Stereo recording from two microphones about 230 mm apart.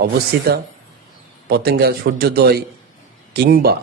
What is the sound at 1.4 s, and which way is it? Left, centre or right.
A man's voice, right.